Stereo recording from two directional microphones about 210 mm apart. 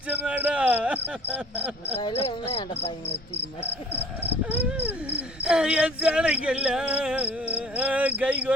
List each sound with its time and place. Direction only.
0.1 s speech: 5° right (ahead or behind)
2.0 s cricket: 25° left (ahead or behind)
4.6 s cricket: 10° right (ahead or behind)